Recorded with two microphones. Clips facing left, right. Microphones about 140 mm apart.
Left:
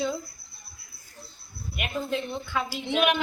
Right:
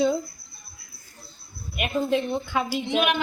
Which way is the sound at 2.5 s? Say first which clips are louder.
Right 1 dB; 15° right (ahead or behind).